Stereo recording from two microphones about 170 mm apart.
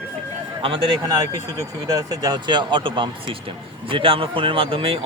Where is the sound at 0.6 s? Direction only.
30° right (ahead or behind).